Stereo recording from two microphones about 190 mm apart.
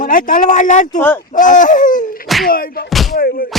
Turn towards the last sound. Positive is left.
turn(degrees=50)  # may be behind; listen again after turning